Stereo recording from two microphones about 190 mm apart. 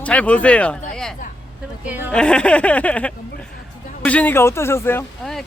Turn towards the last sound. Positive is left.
turn(degrees=5)  # may be behind; listen again after turning